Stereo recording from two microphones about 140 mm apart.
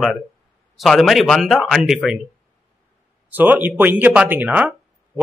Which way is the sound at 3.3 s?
15° right (ahead or behind).